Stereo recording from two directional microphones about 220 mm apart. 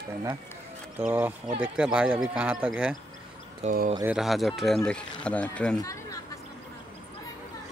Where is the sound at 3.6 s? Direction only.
35° right (ahead or behind).